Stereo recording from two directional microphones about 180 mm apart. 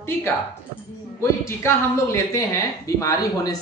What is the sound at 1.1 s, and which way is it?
Speech, 15° left (ahead or behind).